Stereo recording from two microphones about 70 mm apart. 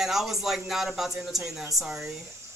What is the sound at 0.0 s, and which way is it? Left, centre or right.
Speech, centre.